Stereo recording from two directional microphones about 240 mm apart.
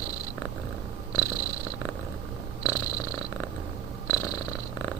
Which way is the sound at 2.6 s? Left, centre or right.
Centre.